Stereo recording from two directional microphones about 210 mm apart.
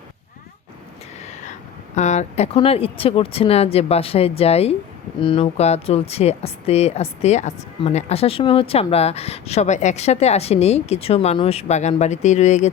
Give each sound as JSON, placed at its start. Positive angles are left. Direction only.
{"t": 1.2, "sound": "vehicle", "side_deg": 35}
{"t": 2.0, "sound": "speech", "side_deg": 35}